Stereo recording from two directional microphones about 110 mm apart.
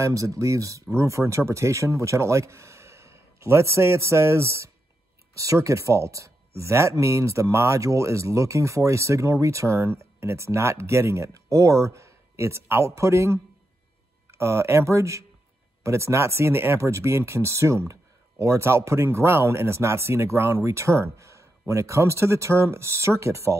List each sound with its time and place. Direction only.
0.0 s speech: 30° right (ahead or behind)